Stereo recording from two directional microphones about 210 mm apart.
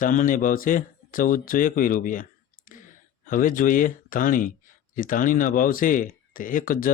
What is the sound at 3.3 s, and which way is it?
Speech, 40° left (ahead or behind).